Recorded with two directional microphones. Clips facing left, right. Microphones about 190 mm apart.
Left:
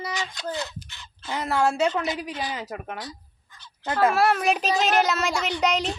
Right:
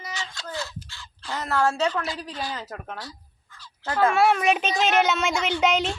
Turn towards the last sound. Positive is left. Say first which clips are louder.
# right 2 dB
turn(degrees=0)  # may be behind; listen again after turning